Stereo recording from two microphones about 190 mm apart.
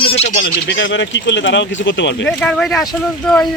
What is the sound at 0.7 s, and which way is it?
Speech, 75° left (ahead or behind).